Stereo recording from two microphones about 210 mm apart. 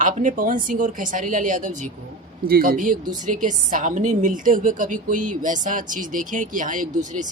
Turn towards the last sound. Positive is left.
turn(degrees=-35)  # may be behind; listen again after turning